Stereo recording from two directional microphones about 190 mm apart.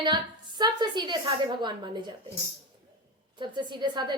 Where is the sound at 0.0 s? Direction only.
25° right (ahead or behind).